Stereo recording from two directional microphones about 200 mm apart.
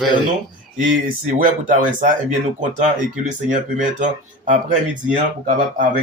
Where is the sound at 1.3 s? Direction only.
40° right (ahead or behind).